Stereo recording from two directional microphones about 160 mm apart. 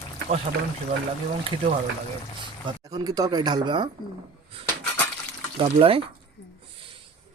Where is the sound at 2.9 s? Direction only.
25° right (ahead or behind).